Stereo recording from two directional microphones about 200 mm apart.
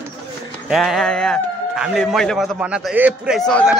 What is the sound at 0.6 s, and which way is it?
A man's voice, centre (ahead or behind).